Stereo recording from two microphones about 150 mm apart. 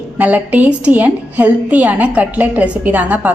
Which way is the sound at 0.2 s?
10° right (ahead or behind).